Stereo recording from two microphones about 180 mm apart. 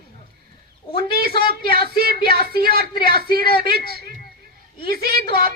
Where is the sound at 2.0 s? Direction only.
60° right (ahead or behind).